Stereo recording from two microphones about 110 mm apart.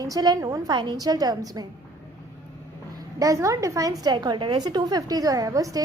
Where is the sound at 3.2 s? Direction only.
30° right (ahead or behind).